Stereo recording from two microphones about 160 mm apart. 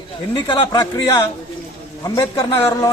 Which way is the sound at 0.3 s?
30° left (ahead or behind).